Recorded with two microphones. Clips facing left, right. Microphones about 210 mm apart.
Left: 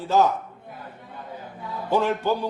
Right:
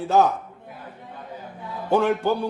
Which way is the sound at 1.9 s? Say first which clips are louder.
Right 3 dB; 55° right (ahead or behind).